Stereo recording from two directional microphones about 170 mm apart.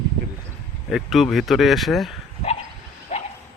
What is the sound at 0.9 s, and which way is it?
Speech, centre (ahead or behind).